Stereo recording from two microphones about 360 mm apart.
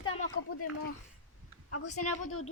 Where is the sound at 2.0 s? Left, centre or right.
Left.